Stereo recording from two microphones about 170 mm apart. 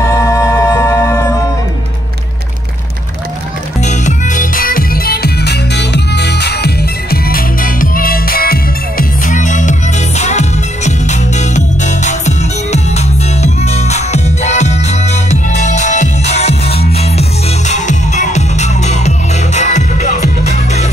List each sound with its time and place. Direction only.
0.0 s music: 20° left (ahead or behind)
3.8 s music: 45° left (ahead or behind)